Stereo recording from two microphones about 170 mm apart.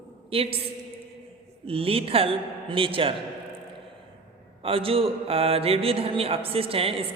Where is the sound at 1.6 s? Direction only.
35° right (ahead or behind).